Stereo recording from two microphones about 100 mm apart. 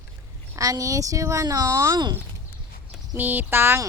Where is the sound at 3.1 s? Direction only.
15° right (ahead or behind).